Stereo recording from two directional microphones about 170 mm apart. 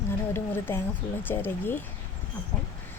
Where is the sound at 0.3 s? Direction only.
15° left (ahead or behind).